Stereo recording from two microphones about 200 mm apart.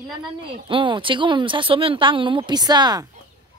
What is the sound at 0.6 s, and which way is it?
Speech, 25° right (ahead or behind).